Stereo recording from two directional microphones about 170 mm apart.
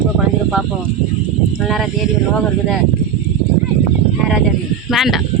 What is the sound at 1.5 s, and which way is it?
Speech, centre (ahead or behind).